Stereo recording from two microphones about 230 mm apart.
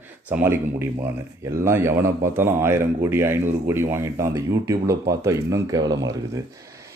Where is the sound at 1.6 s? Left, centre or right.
Centre.